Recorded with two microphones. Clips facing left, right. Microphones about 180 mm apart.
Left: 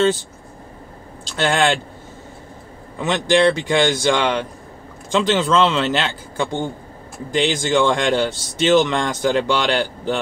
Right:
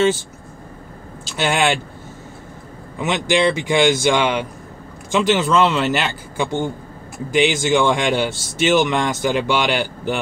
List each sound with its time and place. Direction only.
1.2 s speech: 10° right (ahead or behind)
3.0 s speech: 10° right (ahead or behind)